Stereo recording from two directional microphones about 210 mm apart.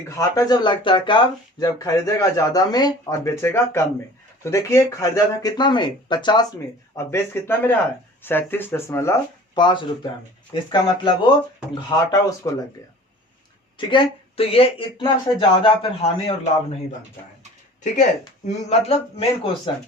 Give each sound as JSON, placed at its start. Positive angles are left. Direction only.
{"t": 0.2, "sound": "speech", "side_deg": 15}
{"t": 13.7, "sound": "speech", "side_deg": 25}
{"t": 18.4, "sound": "speech", "side_deg": 30}